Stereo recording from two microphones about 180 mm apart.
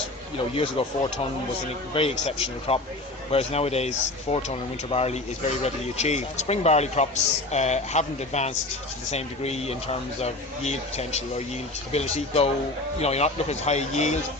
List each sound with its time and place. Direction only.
0.5 s speech: 30° left (ahead or behind)
1.9 s speech: 35° left (ahead or behind)